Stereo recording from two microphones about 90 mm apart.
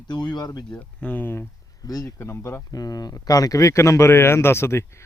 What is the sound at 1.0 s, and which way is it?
Speech, 20° left (ahead or behind).